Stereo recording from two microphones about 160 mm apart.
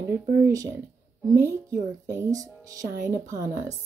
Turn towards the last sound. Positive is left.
turn(degrees=-20)  # may be behind; listen again after turning